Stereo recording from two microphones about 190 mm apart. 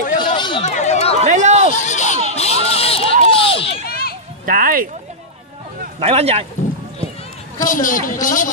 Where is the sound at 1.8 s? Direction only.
40° left (ahead or behind).